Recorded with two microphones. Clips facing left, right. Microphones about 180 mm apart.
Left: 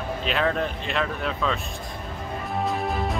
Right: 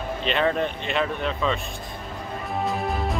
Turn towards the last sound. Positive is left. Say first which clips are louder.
# even
turn(degrees=0)  # may be behind; listen again after turning